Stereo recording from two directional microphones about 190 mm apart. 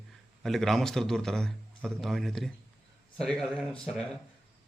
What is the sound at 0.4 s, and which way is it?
Speech, centre (ahead or behind).